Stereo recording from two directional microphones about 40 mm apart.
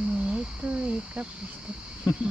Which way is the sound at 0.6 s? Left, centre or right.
Right.